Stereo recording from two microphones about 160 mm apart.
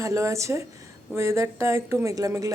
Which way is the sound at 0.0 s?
20° right (ahead or behind).